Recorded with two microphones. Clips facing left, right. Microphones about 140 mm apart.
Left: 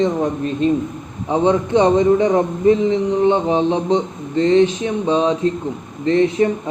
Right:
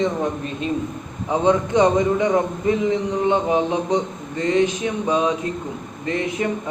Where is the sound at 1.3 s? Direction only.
20° left (ahead or behind).